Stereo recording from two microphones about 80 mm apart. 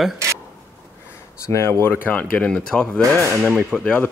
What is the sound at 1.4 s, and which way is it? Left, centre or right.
Speech, left.